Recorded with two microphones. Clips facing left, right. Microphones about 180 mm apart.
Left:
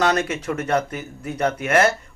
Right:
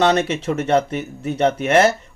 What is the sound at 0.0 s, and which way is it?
Speech, 25° right (ahead or behind).